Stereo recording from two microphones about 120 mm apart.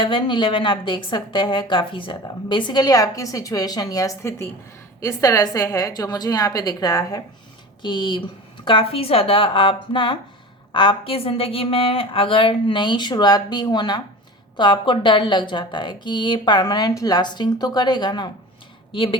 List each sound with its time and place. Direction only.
0.0 s a woman's voice: 40° left (ahead or behind)
7.8 s a woman's voice: 40° left (ahead or behind)